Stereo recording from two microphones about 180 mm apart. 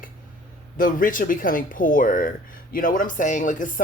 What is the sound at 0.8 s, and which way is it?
Speech, 50° left (ahead or behind).